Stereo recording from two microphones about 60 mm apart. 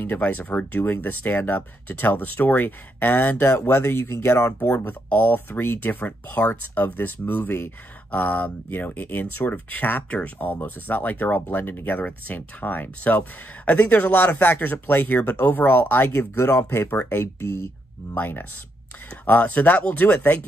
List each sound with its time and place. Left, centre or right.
0.2 s speech: left
4.6 s speech: left